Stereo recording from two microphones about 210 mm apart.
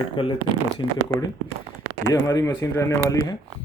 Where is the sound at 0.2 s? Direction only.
25° left (ahead or behind).